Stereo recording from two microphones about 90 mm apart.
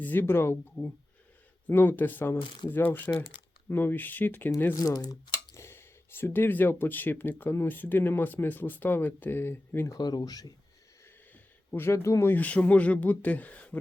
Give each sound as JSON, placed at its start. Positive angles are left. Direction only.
{"t": 0.0, "sound": "speech", "side_deg": 20}
{"t": 4.8, "sound": "speech", "side_deg": 45}
{"t": 5.5, "sound": "speech", "side_deg": 25}
{"t": 9.8, "sound": "speech", "side_deg": 45}
{"t": 11.7, "sound": "speech", "side_deg": 25}
{"t": 12.3, "sound": "speech", "side_deg": 15}